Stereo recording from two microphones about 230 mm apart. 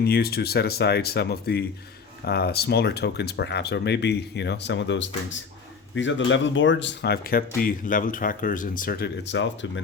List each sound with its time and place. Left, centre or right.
0.0 s speech: left